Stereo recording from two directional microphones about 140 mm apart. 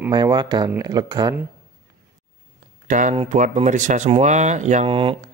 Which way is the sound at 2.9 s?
60° right (ahead or behind).